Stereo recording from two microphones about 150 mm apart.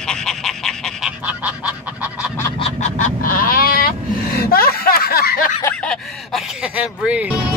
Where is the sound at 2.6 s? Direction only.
55° left (ahead or behind); by 5.5 s 80° left.